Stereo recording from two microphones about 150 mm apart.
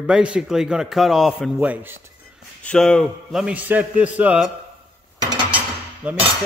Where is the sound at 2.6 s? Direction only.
5° left (ahead or behind).